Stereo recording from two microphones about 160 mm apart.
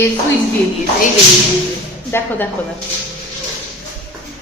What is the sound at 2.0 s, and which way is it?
Speech, 15° left (ahead or behind).